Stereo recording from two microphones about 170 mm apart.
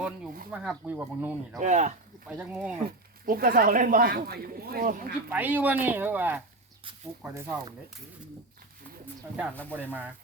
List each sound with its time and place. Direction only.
0.5 s speech: 5° right (ahead or behind)
1.6 s speech: 45° right (ahead or behind)
2.2 s speech: 5° right (ahead or behind)
3.2 s speech: 55° right (ahead or behind)
5.3 s speech: 10° right (ahead or behind)
9.7 s speech: 10° right (ahead or behind)